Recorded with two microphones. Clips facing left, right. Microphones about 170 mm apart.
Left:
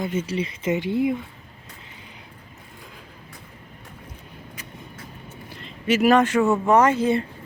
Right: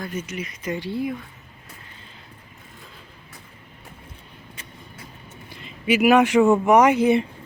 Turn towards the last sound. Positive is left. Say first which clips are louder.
# right 2 dB
turn(degrees=-15)  # may be behind; listen again after turning